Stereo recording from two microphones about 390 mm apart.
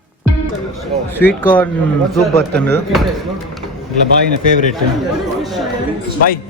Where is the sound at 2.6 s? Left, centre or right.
Centre.